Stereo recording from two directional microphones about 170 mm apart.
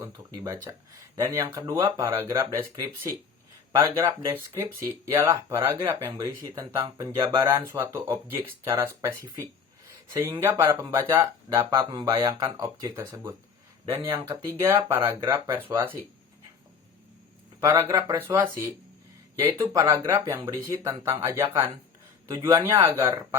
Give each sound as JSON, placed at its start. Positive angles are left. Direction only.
{"t": 0.0, "sound": "speech", "side_deg": -20}
{"t": 3.7, "sound": "speech", "side_deg": -20}
{"t": 17.6, "sound": "speech", "side_deg": -20}